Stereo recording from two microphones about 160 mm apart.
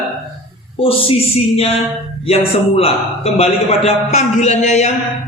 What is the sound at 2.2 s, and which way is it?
A man's voice, 40° left (ahead or behind).